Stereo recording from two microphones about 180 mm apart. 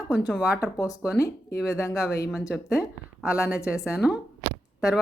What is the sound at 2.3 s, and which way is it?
Speech, 5° right (ahead or behind).